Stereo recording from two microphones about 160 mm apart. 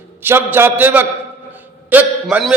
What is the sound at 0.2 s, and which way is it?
A man's voice, 15° right (ahead or behind).